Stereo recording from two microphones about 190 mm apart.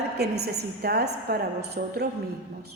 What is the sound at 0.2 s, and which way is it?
A man's voice, 60° right (ahead or behind).